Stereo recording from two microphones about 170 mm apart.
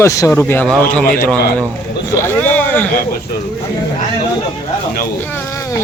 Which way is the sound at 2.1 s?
10° left (ahead or behind).